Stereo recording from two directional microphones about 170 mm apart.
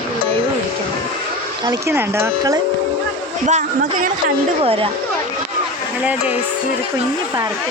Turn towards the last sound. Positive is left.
turn(degrees=-10)  # may be behind; listen again after turning